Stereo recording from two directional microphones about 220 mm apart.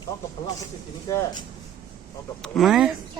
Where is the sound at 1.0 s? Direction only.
15° left (ahead or behind).